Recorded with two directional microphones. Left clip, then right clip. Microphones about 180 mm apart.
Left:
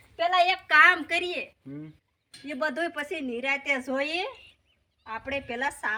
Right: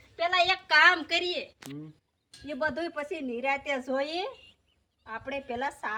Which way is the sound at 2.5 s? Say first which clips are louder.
Left 2 dB; 10° left (ahead or behind).